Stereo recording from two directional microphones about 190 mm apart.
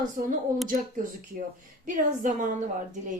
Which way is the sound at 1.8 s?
45° right (ahead or behind).